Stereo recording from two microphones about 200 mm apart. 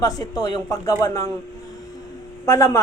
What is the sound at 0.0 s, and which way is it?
Speech, 15° left (ahead or behind).